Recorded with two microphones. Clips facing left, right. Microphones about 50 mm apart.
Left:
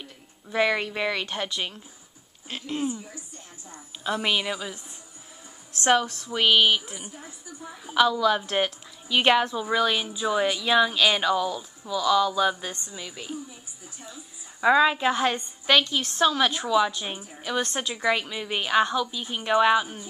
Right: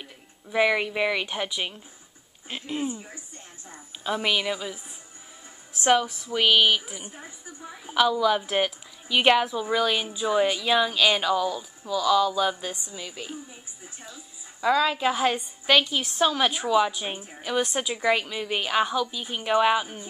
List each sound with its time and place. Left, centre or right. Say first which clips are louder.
0.0 s a woman's voice: even; centre
2.9 s a woman's voice: left 1 dB; right
3.7 s speech: even; centre
7.2 s a woman's voice: right 1 dB; right
7.9 s speech: even; centre
14.0 s a sound: left 3 dB; centre
15.0 s a woman's voice: even; centre